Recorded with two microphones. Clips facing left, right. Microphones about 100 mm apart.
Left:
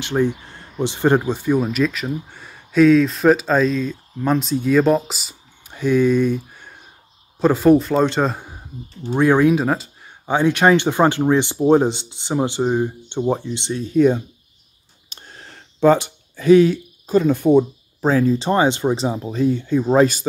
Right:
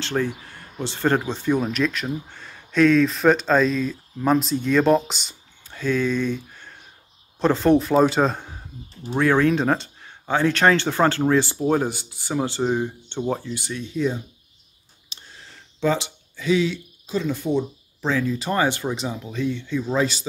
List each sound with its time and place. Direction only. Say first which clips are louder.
0.0 s speech: left 5 dB; 15° left (ahead or behind)
5.7 s a man's voice: left 6 dB; 15° left (ahead or behind)
10.2 s speech: left 3 dB; 15° left (ahead or behind)
13.8 s speech: left 10 dB; 55° left (ahead or behind)